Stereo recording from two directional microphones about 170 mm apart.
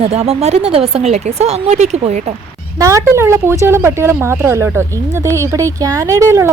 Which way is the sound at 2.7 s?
20° right (ahead or behind).